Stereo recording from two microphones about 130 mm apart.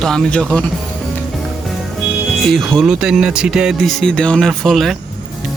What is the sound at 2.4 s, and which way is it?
Speech, centre (ahead or behind).